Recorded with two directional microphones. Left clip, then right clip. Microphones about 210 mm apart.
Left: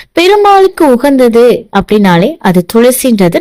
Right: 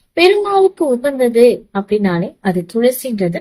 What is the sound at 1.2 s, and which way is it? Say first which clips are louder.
A woman's voice: left 2 dB; 50° left (ahead or behind).